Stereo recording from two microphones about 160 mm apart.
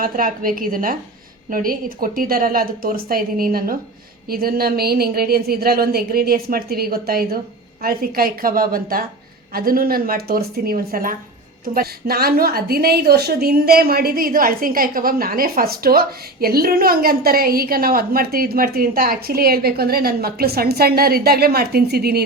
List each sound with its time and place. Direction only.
0.0 s a woman's voice: 60° right (ahead or behind); by 22.2 s 80° right